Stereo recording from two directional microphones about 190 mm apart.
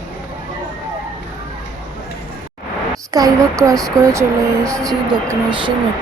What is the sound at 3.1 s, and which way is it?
Speech, 20° right (ahead or behind).